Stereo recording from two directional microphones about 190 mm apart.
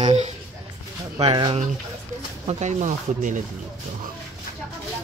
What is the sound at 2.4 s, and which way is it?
Speech, 40° right (ahead or behind).